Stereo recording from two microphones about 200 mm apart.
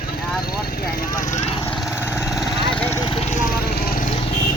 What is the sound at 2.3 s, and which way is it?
Vehicle, centre (ahead or behind).